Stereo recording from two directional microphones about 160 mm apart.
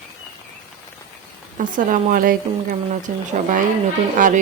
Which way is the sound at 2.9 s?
50° right (ahead or behind).